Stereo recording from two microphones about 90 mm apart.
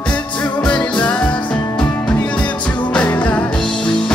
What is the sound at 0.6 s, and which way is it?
Music, 10° left (ahead or behind).